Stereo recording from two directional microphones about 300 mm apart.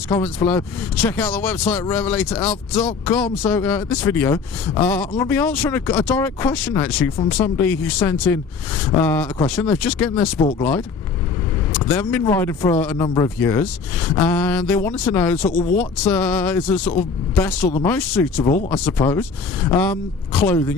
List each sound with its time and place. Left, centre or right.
0.1 s speech: centre
16.8 s speech: left
17.3 s speech: centre